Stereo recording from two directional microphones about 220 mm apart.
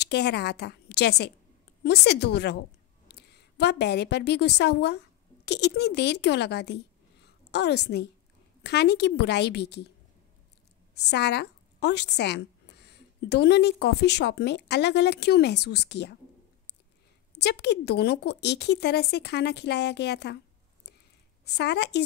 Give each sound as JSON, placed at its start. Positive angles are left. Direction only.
{"t": 0.0, "sound": "a woman's voice", "side_deg": 50}
{"t": 11.0, "sound": "a woman's voice", "side_deg": 50}
{"t": 17.3, "sound": "a woman's voice", "side_deg": 50}
{"t": 21.5, "sound": "a woman's voice", "side_deg": 50}